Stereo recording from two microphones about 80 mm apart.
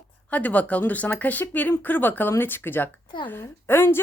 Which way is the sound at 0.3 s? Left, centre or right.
Centre.